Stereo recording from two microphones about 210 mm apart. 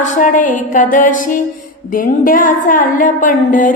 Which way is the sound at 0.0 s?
35° left (ahead or behind).